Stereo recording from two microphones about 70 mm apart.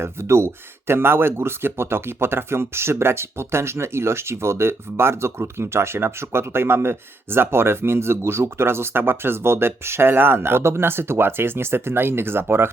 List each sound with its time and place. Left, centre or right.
0.0 s speech: right